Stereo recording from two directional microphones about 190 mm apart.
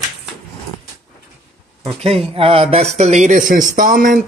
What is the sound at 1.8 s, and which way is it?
Speech, 30° right (ahead or behind).